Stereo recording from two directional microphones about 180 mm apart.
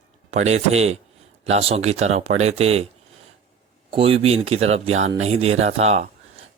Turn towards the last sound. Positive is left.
turn(degrees=-35)  # may be behind; listen again after turning